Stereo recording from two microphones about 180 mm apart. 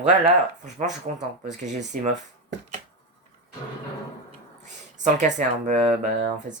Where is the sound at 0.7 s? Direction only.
40° right (ahead or behind).